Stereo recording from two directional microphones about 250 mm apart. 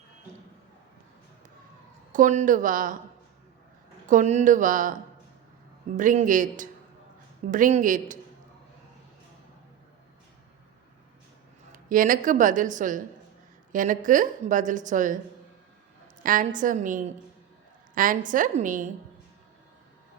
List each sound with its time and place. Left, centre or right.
2.1 s a woman's voice: right
4.1 s a woman's voice: right
6.0 s a woman's voice: right
11.7 s a woman's voice: right
16.2 s a woman's voice: right